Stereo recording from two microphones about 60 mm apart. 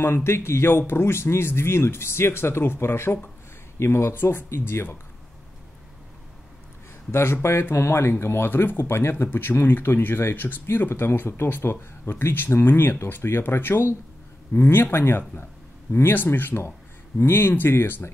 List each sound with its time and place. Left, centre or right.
0.0 s a man's voice: left
7.1 s a man's voice: left